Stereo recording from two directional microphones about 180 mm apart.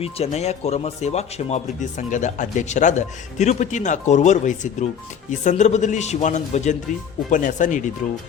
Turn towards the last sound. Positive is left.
turn(degrees=45)  # may be behind; listen again after turning